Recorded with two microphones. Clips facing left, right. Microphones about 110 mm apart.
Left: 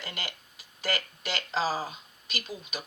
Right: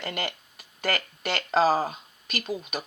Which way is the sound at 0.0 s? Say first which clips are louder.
Right 8 dB; 55° right (ahead or behind).